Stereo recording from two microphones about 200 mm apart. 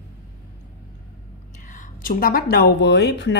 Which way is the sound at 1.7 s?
45° left (ahead or behind).